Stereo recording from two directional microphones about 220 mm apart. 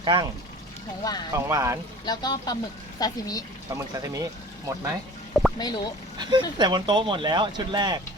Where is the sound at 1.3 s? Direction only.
15° right (ahead or behind).